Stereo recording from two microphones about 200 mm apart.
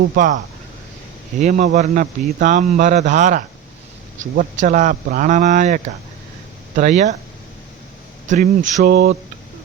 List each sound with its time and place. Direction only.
0.1 s speech: 40° right (ahead or behind)
1.4 s speech: 40° right (ahead or behind)
8.3 s mantra: 45° right (ahead or behind)